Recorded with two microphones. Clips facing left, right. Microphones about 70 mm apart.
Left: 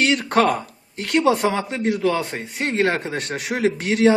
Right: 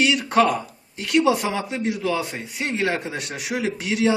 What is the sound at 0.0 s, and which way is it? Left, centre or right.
Speech, left.